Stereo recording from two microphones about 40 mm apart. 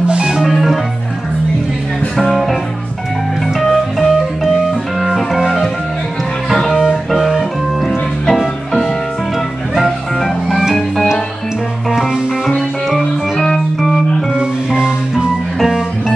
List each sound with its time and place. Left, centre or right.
0.1 s music: right
0.4 s organ: centre
2.1 s music: centre
3.5 s music: centre
5.0 s organ: centre
6.5 s music: centre
7.1 s organ: centre
8.3 s music: centre
13.7 s organ: centre
14.7 s music: centre